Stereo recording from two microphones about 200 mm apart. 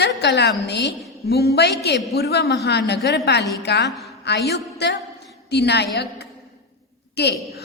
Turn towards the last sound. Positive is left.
turn(degrees=55)  # may be behind; listen again after turning